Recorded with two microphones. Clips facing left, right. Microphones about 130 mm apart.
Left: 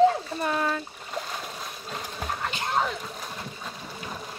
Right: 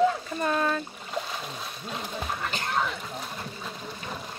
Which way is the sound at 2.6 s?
30° left (ahead or behind).